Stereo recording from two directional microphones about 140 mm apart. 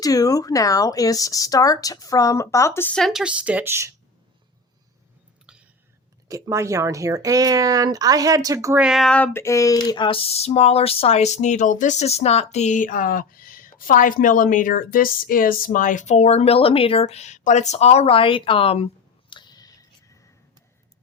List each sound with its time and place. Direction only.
0.0 s speech: 25° left (ahead or behind)
2.9 s a woman's voice: centre (ahead or behind); by 3.9 s 20° right (ahead or behind)
5.5 s a sound: 5° right (ahead or behind)
6.2 s speech: 20° right (ahead or behind)
8.8 s a sound: centre (ahead or behind); by 18.9 s 45° left (ahead or behind)
19.3 s tick: 30° left (ahead or behind)